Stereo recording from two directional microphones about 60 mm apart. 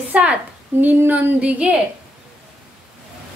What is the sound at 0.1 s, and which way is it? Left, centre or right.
A woman's voice, right.